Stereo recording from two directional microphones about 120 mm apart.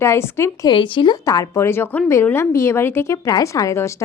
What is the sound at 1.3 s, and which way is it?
A woman's voice, 25° left (ahead or behind).